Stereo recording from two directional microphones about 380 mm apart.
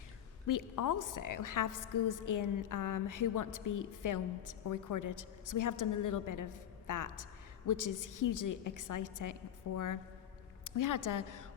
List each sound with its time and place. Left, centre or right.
0.4 s a woman's voice: left